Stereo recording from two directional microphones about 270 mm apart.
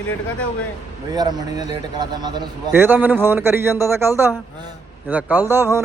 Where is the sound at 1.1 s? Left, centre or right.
Centre.